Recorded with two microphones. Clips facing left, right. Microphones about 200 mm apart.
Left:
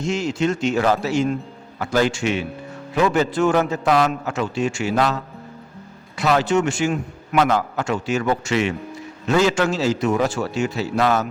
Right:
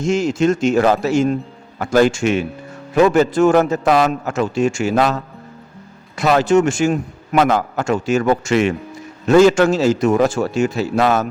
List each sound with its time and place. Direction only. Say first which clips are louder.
0.0 s a man's voice: right 5 dB; 45° right (ahead or behind)